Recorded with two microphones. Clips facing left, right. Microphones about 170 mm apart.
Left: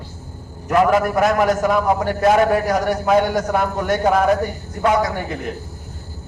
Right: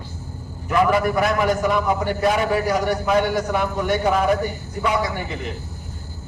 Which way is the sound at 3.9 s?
45° left (ahead or behind).